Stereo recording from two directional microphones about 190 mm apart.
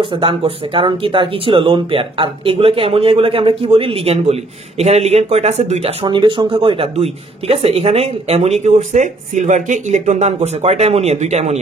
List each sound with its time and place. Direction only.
0.0 s speech: 25° right (ahead or behind)